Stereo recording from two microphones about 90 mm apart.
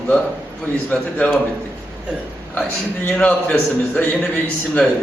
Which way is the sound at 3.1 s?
15° left (ahead or behind).